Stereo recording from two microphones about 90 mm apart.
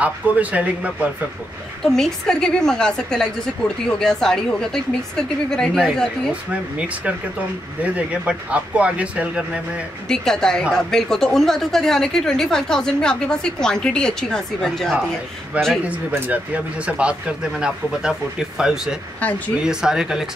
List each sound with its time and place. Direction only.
0.0 s speech: 15° right (ahead or behind)
1.9 s a woman's voice: 5° left (ahead or behind)
7.8 s speech: 15° right (ahead or behind)
10.0 s a woman's voice: 5° left (ahead or behind)
15.5 s speech: 15° right (ahead or behind)